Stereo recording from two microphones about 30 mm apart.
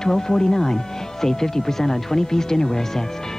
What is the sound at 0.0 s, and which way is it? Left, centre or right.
Speech, centre.